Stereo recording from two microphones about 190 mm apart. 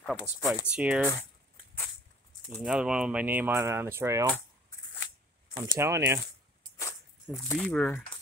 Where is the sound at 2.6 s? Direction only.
5° right (ahead or behind).